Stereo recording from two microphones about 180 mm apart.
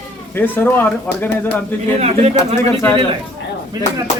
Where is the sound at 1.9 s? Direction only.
35° right (ahead or behind).